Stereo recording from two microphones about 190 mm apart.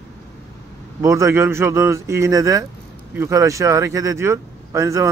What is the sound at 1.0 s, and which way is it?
Speech, 15° right (ahead or behind).